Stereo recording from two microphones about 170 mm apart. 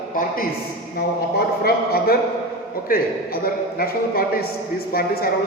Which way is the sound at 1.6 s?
65° left (ahead or behind).